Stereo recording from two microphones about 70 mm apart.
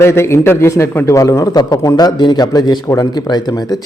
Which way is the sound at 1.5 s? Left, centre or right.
Left.